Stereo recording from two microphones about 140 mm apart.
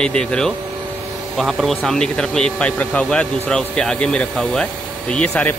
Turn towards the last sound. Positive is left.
turn(degrees=10)  # may be behind; listen again after turning